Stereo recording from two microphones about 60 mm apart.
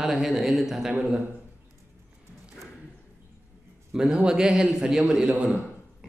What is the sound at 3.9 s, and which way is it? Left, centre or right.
A man's voice, centre.